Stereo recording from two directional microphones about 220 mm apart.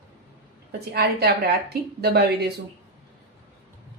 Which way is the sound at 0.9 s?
50° right (ahead or behind).